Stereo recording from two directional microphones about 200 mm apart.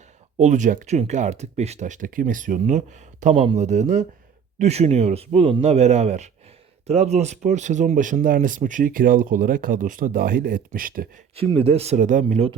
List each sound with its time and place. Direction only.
0.3 s speech: 35° right (ahead or behind)
11.3 s speech: 30° right (ahead or behind)